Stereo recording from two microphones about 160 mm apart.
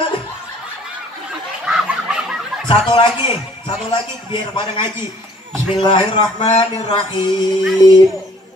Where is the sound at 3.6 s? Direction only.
30° left (ahead or behind).